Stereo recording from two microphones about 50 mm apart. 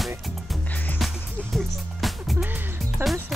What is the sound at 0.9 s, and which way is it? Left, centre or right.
Music, centre.